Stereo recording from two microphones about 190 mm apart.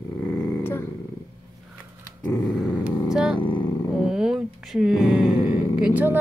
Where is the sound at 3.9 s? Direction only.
5° right (ahead or behind).